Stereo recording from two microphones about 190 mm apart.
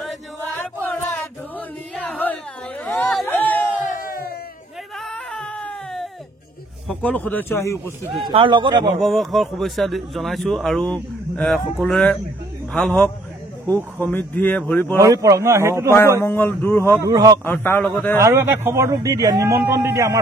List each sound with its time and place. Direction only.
2.0 s a sound: 10° left (ahead or behind)
5.0 s a sound: centre (ahead or behind)
6.9 s speech: 10° left (ahead or behind)
8.1 s speech: 25° right (ahead or behind)
9.0 s speech: centre (ahead or behind)
15.0 s a man's voice: 15° right (ahead or behind)
16.2 s speech: 10° left (ahead or behind)
17.0 s a man's voice: 20° right (ahead or behind)
17.5 s speech: 10° left (ahead or behind)
18.2 s a man's voice: 15° right (ahead or behind)